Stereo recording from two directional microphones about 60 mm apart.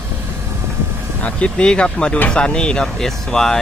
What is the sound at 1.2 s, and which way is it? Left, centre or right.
Speech, centre.